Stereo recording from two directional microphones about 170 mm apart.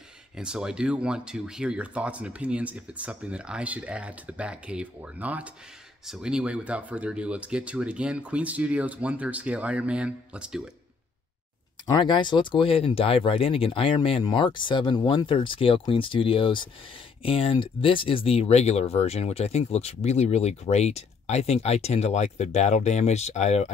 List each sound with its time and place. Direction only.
0.4 s speech: 5° right (ahead or behind)
11.8 s speech: 25° left (ahead or behind)